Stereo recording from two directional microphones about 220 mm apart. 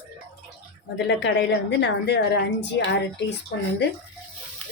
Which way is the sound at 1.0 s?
55° left (ahead or behind).